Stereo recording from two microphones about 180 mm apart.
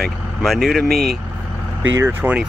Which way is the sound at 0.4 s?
Centre (ahead or behind).